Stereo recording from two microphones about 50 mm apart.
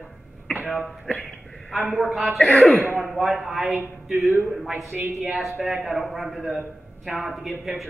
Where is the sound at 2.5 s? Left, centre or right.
Left.